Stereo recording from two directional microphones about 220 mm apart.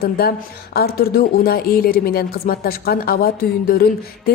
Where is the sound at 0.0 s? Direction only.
45° left (ahead or behind).